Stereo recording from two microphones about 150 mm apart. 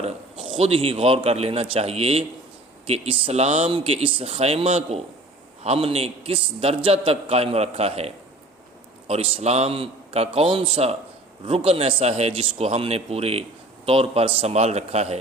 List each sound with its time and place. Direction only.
0.5 s a man's voice: 40° right (ahead or behind)